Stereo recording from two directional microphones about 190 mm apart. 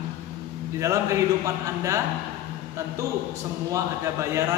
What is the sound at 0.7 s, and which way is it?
Speech, 15° right (ahead or behind).